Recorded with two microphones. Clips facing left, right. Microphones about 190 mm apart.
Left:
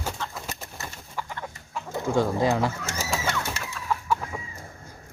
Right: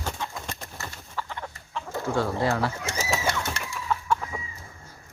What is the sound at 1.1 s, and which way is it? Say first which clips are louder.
Chicken: even; 10° left (ahead or behind).